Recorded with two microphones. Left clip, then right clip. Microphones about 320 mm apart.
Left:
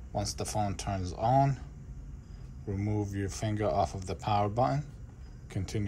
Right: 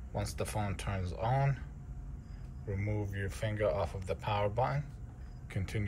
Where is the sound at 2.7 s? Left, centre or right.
Centre.